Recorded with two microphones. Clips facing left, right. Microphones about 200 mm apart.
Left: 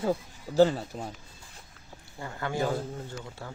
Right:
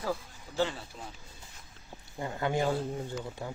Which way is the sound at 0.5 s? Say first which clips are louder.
Left 10 dB; 40° left (ahead or behind).